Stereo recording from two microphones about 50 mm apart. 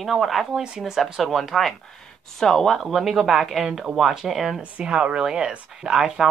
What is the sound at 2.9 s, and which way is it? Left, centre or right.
Speech, centre.